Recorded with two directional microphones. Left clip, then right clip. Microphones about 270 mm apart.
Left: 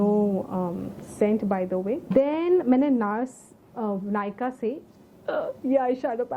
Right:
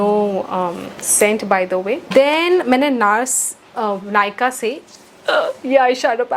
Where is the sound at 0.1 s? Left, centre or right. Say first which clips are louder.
Right 8 dB; right.